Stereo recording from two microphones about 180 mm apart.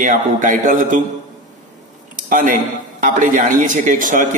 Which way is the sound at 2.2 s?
50° right (ahead or behind).